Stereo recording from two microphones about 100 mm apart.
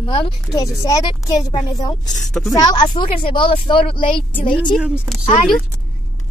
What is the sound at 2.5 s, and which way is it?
A woman's voice, 45° left (ahead or behind).